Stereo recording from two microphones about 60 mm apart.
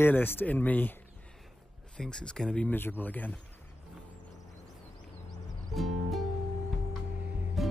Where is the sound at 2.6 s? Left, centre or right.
Left.